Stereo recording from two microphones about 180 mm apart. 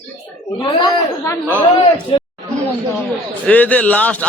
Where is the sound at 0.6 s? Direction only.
25° left (ahead or behind).